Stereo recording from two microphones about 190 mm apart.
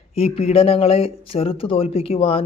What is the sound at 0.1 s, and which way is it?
Speech, 35° left (ahead or behind).